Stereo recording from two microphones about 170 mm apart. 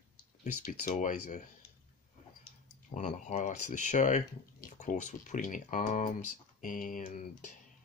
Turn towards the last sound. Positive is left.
turn(degrees=50)  # may be behind; listen again after turning